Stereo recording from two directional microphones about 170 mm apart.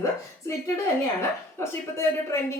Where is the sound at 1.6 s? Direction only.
15° left (ahead or behind).